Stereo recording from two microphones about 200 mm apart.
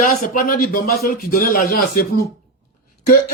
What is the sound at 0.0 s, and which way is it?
A man's voice, 45° left (ahead or behind).